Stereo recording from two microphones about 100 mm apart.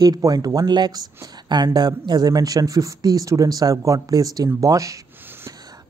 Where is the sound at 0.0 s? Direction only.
40° right (ahead or behind).